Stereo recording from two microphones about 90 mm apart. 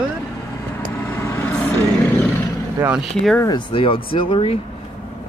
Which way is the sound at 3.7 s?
80° left.